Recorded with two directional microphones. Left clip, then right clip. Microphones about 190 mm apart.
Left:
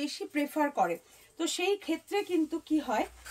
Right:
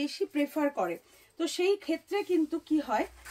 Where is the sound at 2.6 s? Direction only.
20° left (ahead or behind).